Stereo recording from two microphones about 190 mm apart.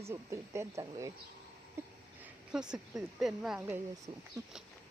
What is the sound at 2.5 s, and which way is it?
Speech, 5° right (ahead or behind).